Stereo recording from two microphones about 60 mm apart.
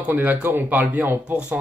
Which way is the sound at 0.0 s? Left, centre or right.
Right.